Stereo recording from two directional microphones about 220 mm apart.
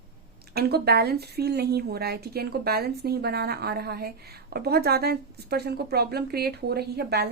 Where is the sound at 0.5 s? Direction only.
45° right (ahead or behind).